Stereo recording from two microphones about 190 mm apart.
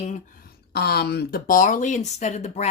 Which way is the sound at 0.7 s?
55° left (ahead or behind).